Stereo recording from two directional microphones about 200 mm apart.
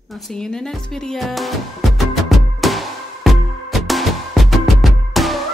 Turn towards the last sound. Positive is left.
turn(degrees=0)  # may be behind; listen again after turning